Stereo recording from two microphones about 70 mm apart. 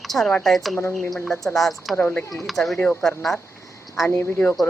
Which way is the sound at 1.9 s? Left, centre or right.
Centre.